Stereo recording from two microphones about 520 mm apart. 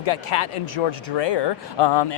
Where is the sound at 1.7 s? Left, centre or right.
Left.